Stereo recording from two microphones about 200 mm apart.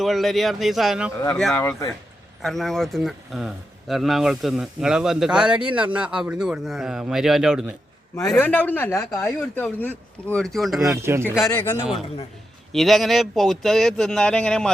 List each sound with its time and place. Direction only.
0.0 s speech: centre (ahead or behind)
1.5 s a man's voice: 15° left (ahead or behind)
2.4 s speech: centre (ahead or behind)
8.1 s a man's voice: 15° left (ahead or behind)
11.0 s speech: 10° right (ahead or behind)
11.4 s a man's voice: 10° left (ahead or behind)
12.7 s speech: centre (ahead or behind)